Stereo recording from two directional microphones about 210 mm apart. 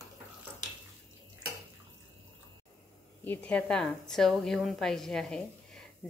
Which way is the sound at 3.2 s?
5° left (ahead or behind).